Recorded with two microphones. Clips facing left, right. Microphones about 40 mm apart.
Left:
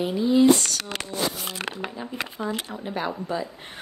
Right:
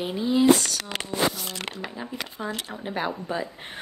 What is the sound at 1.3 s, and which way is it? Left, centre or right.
Speech, left.